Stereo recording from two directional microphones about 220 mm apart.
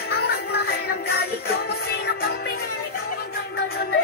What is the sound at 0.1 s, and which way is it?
Music, 45° left (ahead or behind).